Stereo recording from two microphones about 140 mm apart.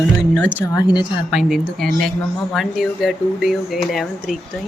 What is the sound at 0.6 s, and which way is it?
Speech, 25° left (ahead or behind).